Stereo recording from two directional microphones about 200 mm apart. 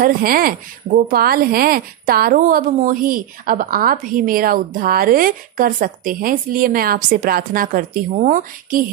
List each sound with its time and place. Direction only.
0.0 s speech: 45° right (ahead or behind)